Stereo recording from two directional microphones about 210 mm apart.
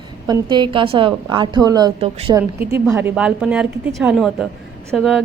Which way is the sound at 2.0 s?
30° right (ahead or behind).